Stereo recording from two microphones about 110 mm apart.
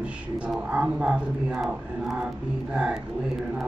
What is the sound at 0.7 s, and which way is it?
Speech, 10° right (ahead or behind).